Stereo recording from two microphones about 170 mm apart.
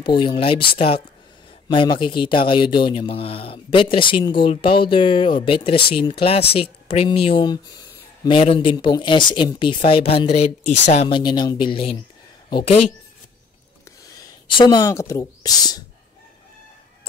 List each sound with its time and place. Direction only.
0.0 s a man's voice: 25° left (ahead or behind)
8.4 s a man's voice: 35° left (ahead or behind)
11.1 s a man's voice: 25° left (ahead or behind)
14.0 s speech: 20° left (ahead or behind)